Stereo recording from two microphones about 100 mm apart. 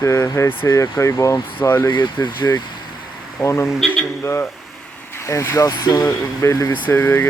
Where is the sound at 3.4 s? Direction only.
25° left (ahead or behind).